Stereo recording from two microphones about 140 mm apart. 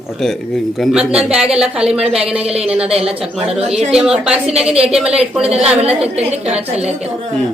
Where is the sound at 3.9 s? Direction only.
5° right (ahead or behind).